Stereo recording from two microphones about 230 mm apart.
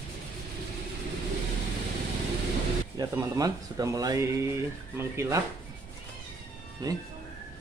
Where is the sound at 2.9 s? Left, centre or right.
Centre.